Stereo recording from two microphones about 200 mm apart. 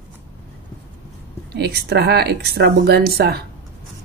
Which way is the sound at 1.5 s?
55° right (ahead or behind).